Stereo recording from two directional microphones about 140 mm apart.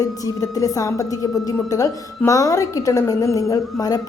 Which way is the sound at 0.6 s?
25° left (ahead or behind).